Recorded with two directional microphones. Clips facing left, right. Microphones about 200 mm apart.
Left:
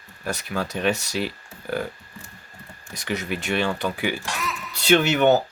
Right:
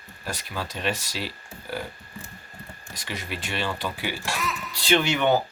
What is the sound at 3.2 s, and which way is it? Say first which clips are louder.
Speech: left 5 dB; 50° left (ahead or behind).